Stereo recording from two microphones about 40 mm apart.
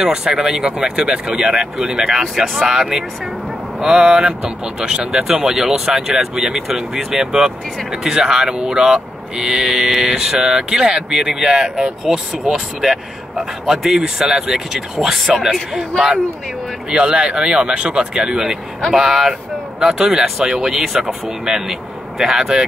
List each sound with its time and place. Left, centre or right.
0.0 s speech: centre
4.0 s speech: centre
16.9 s speech: right